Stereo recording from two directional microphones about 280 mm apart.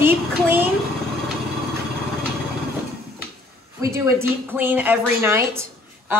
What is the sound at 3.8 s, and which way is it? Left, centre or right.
Speech, centre.